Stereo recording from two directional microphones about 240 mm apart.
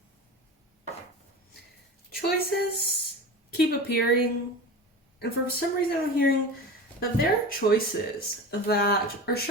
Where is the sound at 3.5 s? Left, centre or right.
Left.